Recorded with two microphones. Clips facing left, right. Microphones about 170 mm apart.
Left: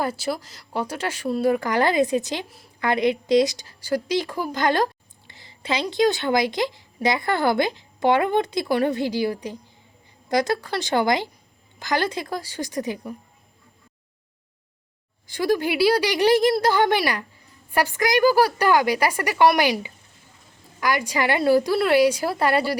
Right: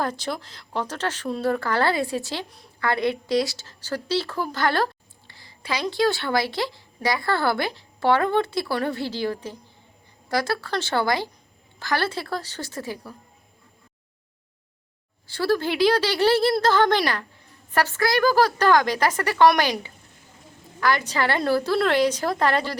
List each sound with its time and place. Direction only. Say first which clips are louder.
0.0 s a woman's voice: left 2 dB; 5° left (ahead or behind)
15.3 s a woman's voice: left 1 dB; 15° left (ahead or behind)